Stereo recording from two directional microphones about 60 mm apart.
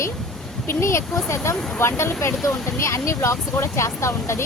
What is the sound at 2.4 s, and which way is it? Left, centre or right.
Speech, left.